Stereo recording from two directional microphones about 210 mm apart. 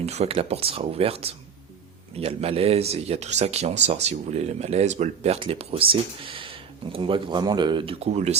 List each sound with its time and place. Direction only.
0.0 s speech: 30° right (ahead or behind)